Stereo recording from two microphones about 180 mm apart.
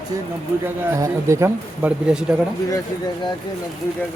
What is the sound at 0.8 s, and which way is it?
Speech, 15° right (ahead or behind).